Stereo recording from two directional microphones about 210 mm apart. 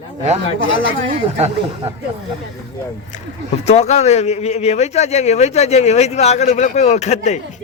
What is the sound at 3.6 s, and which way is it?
Speech, 30° left (ahead or behind).